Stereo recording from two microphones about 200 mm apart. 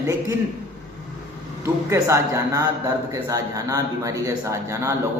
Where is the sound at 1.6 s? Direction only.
15° right (ahead or behind).